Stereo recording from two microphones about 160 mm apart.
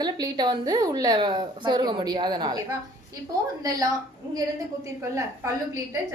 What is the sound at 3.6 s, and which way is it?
Speech, 25° right (ahead or behind).